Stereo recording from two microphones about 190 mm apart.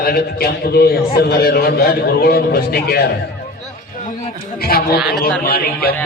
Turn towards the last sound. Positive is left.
turn(degrees=50)  # may be behind; listen again after turning